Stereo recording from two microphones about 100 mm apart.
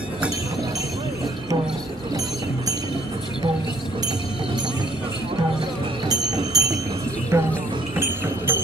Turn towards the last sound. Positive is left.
turn(degrees=-25)  # may be behind; listen again after turning